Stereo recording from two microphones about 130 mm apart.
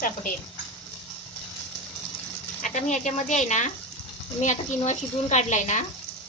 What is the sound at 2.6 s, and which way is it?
A woman's voice, 70° left (ahead or behind).